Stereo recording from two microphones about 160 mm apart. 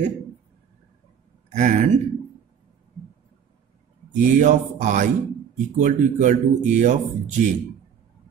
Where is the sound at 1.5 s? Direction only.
50° right (ahead or behind).